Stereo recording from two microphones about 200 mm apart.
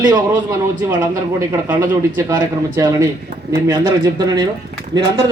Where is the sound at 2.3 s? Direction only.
15° right (ahead or behind).